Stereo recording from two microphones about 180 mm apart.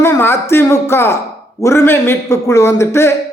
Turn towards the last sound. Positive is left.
turn(degrees=15)  # may be behind; listen again after turning